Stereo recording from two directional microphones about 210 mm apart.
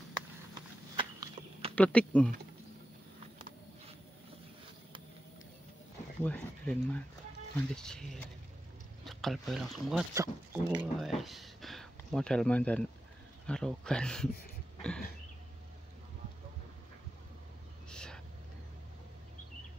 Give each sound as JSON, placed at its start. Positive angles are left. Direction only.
{"t": 0.9, "sound": "walk", "side_deg": -25}
{"t": 1.8, "sound": "speech", "side_deg": 5}
{"t": 6.2, "sound": "speech", "side_deg": 5}
{"t": 10.1, "sound": "speech", "side_deg": -15}
{"t": 14.8, "sound": "a sound", "side_deg": 5}
{"t": 17.8, "sound": "vehicle", "side_deg": 5}